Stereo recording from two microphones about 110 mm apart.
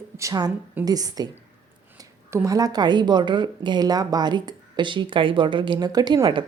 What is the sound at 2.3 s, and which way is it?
A woman's voice, 30° right (ahead or behind).